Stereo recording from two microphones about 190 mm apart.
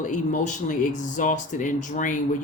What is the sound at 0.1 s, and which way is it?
Speech, 40° left (ahead or behind).